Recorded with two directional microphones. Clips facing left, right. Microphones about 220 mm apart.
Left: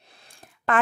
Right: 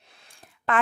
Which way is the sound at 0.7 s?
45° left (ahead or behind).